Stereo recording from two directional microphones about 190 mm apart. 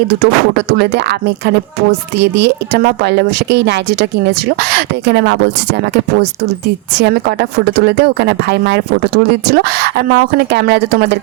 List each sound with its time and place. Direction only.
0.2 s speech: 60° right (ahead or behind)
2.1 s speech: 65° right (ahead or behind)
7.0 s speech: 60° right (ahead or behind)